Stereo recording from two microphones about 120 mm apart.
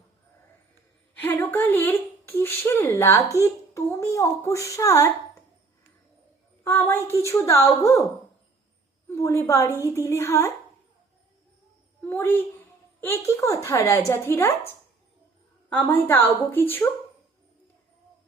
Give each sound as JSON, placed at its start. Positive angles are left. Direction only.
{"t": 1.1, "sound": "a sound", "side_deg": 15}
{"t": 3.4, "sound": "a child's voice", "side_deg": 25}
{"t": 6.7, "sound": "a woman's voice", "side_deg": 15}
{"t": 9.0, "sound": "a woman's voice", "side_deg": 25}
{"t": 12.0, "sound": "a woman's voice", "side_deg": 20}
{"t": 15.7, "sound": "a woman's voice", "side_deg": 15}